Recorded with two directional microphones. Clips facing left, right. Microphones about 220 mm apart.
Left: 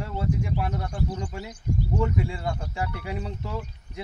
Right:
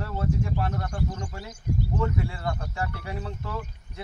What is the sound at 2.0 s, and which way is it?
Speech, 15° left (ahead or behind).